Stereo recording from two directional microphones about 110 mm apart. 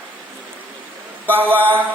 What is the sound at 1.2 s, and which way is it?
Speech, 15° right (ahead or behind).